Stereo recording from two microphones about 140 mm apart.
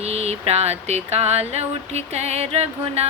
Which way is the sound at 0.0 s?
50° right (ahead or behind).